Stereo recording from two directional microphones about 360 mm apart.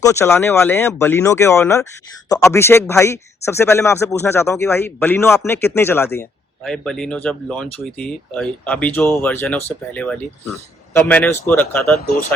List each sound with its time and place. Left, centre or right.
0.0 s a man's voice: centre